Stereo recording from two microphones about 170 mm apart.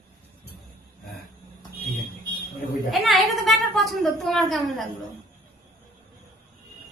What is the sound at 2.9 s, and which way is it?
A woman's voice, centre (ahead or behind).